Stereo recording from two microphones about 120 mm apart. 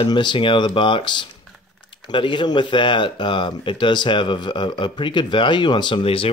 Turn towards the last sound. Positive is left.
turn(degrees=50)  # may be behind; listen again after turning